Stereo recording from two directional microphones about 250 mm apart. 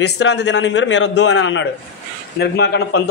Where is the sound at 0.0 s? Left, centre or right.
Left.